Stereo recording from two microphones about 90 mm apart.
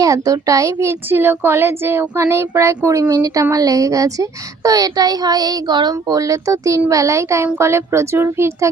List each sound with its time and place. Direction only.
0.0 s a child's voice: 40° right (ahead or behind)
3.0 s a child's voice: 45° right (ahead or behind); by 8.5 s 30° right (ahead or behind)